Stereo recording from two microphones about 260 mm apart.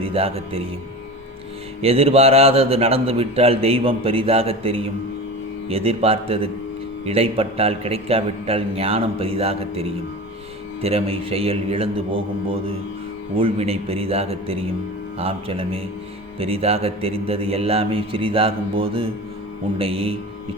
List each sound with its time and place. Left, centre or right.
0.0 s speech: right
1.8 s speech: right